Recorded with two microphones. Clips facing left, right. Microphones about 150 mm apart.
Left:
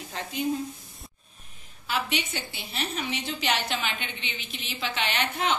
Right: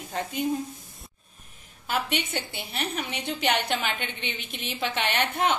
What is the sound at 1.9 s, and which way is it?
A woman's voice, 55° right (ahead or behind).